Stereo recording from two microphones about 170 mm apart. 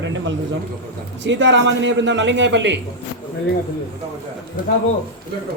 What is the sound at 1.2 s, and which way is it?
A man's voice, 90° right.